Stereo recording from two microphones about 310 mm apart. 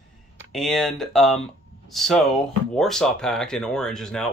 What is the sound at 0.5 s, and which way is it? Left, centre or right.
Speech, centre.